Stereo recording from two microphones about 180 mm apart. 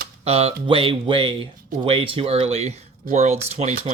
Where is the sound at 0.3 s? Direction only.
35° right (ahead or behind).